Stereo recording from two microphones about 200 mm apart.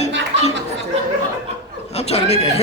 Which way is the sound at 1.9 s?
30° left (ahead or behind).